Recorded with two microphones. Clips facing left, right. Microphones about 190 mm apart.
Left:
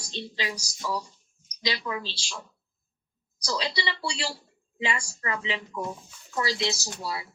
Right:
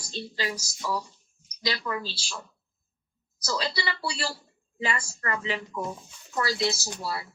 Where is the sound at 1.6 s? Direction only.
15° left (ahead or behind).